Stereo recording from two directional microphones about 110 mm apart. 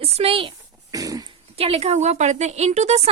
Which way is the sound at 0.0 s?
60° right (ahead or behind).